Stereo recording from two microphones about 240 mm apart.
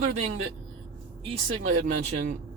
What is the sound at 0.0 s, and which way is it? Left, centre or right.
Speech, right.